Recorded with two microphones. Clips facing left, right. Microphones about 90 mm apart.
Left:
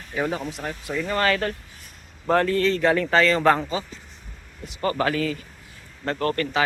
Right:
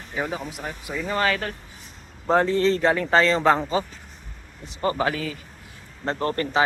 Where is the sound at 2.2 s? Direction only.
20° right (ahead or behind).